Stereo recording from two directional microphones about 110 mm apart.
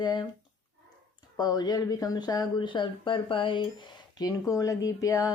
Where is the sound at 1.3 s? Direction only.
40° left (ahead or behind).